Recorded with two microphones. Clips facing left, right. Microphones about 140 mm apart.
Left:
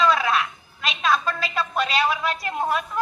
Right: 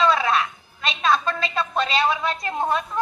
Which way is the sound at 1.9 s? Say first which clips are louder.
Right 1 dB; 25° right (ahead or behind).